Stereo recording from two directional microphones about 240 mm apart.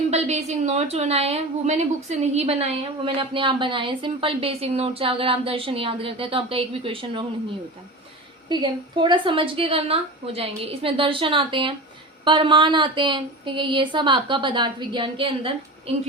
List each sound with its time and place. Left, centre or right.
0.1 s a woman's voice: right
8.4 s a woman's voice: centre